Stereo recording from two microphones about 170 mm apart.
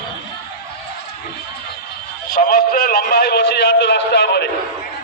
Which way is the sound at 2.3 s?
55° left (ahead or behind).